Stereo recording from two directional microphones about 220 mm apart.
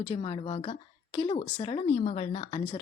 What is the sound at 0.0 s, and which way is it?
Speech, 25° left (ahead or behind).